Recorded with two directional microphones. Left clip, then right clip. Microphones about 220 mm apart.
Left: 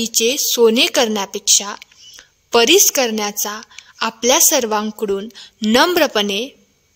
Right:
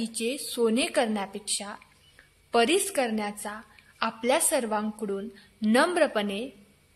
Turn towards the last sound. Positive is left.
turn(degrees=50)  # may be behind; listen again after turning